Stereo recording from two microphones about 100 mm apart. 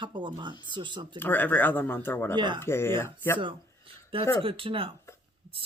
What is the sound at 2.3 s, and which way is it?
Speech, 50° right (ahead or behind).